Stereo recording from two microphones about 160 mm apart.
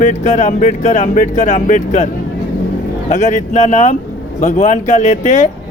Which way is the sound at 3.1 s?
50° left (ahead or behind).